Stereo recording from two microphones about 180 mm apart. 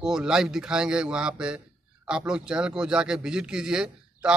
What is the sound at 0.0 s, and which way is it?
Speech, 5° right (ahead or behind).